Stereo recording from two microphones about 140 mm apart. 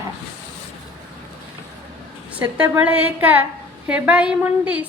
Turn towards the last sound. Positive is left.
turn(degrees=-10)  # may be behind; listen again after turning